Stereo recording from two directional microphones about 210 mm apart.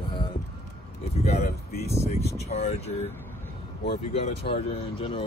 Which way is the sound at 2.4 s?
30° left (ahead or behind).